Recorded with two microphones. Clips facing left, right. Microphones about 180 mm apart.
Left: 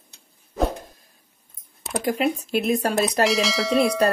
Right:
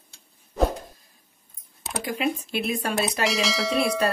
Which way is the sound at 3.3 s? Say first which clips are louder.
Left 3 dB; centre (ahead or behind).